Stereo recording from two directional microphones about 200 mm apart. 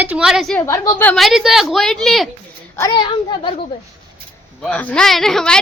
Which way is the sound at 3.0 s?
25° left (ahead or behind).